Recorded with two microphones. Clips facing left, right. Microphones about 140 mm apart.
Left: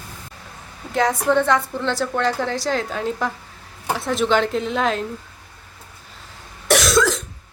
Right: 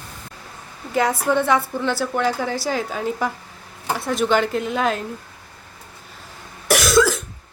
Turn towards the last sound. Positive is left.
turn(degrees=-5)  # may be behind; listen again after turning